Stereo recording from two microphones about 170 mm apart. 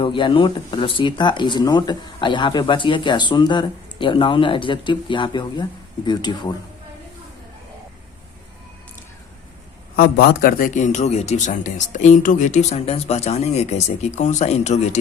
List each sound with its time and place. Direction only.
0.0 s speech: 30° left (ahead or behind)
9.9 s a man's voice: 60° left (ahead or behind); by 14.8 s 40° left (ahead or behind)